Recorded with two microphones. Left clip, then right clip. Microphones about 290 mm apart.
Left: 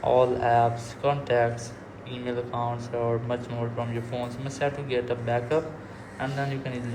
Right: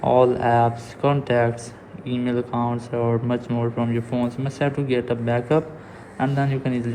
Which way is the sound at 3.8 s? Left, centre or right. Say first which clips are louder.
Right 7 dB; right.